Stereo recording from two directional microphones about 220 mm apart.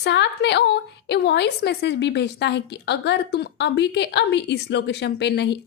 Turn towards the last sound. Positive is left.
turn(degrees=50)  # may be behind; listen again after turning